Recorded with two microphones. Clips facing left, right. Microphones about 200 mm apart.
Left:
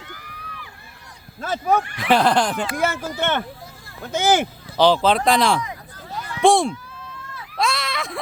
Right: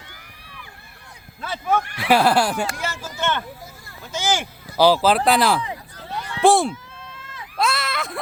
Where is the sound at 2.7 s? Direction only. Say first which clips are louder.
Left 6 dB; 55° left (ahead or behind).